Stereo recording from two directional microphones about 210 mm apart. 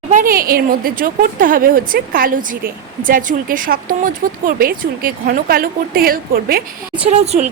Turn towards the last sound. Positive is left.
turn(degrees=-30)  # may be behind; listen again after turning